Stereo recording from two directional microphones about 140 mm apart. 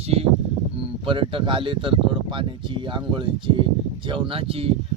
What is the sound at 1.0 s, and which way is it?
Speech, 40° right (ahead or behind).